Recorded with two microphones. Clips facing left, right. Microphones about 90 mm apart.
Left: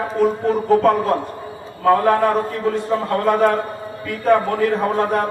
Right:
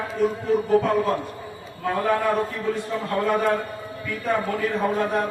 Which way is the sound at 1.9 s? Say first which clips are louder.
Left 8 dB; 60° left (ahead or behind).